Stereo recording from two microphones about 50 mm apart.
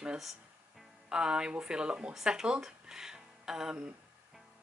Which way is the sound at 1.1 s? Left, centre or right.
Centre.